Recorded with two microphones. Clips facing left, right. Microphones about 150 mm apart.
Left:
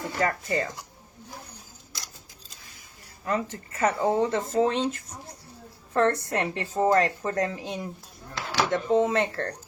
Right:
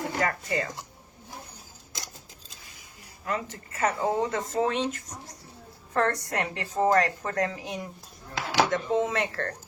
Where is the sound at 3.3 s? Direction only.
35° left (ahead or behind).